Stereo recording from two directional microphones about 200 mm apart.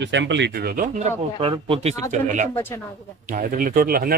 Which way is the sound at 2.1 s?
40° right (ahead or behind).